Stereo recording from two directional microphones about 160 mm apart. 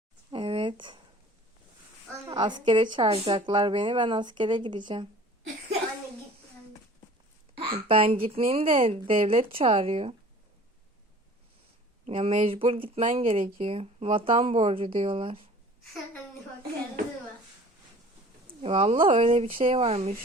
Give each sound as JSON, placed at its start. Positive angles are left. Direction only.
{"t": 0.3, "sound": "a sound", "side_deg": -30}
{"t": 2.2, "sound": "a woman's voice", "side_deg": -25}
{"t": 7.6, "sound": "speech", "side_deg": -35}
{"t": 12.0, "sound": "speech", "side_deg": -40}
{"t": 18.4, "sound": "speech", "side_deg": -35}